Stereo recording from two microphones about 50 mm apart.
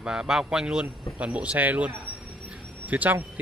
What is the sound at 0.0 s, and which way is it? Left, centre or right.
Speech, centre.